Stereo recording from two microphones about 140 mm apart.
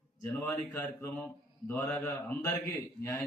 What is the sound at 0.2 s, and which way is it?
A man's voice, 15° left (ahead or behind).